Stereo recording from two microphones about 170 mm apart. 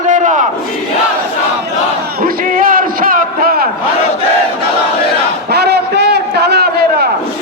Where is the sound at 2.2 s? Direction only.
55° right (ahead or behind).